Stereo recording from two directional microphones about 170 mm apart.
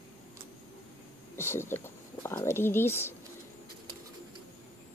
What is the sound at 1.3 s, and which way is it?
Speech, 15° left (ahead or behind).